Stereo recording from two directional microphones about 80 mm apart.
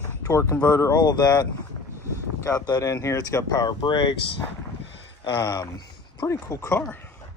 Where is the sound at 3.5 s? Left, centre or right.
Left.